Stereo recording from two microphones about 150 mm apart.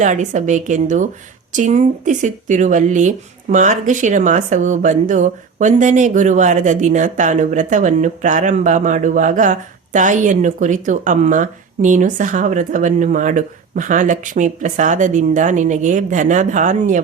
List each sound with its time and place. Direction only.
0.0 s speech: 55° right (ahead or behind)